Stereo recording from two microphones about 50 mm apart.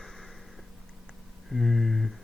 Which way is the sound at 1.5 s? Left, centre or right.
Centre.